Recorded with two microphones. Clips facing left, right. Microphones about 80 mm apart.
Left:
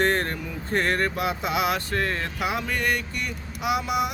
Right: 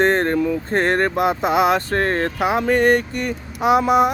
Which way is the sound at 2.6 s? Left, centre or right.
Right.